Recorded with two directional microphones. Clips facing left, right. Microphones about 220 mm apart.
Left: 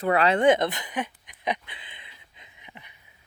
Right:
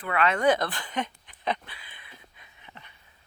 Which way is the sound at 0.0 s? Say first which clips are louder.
Left 4 dB; 35° left (ahead or behind).